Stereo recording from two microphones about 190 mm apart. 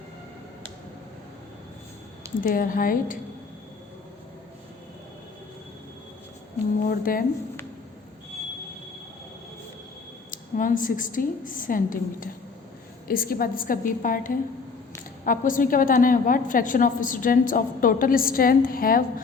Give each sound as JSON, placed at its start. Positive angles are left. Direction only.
{"t": 2.4, "sound": "a woman's voice", "side_deg": 45}
{"t": 6.8, "sound": "a woman's voice", "side_deg": 45}
{"t": 10.3, "sound": "a woman's voice", "side_deg": 45}